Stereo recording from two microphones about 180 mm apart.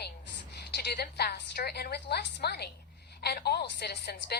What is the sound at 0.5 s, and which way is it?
A woman's voice, 65° left (ahead or behind).